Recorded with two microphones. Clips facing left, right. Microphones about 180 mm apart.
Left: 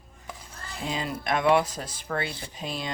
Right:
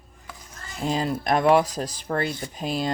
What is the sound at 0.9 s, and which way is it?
Speech, 40° right (ahead or behind).